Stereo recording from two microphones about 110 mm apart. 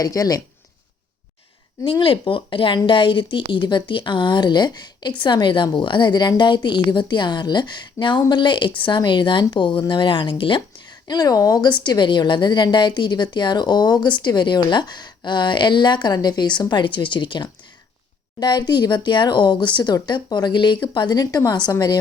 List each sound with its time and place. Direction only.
0.0 s a woman's voice: 30° left (ahead or behind)
1.8 s a woman's voice: 55° left (ahead or behind)
11.1 s a woman's voice: 35° left (ahead or behind)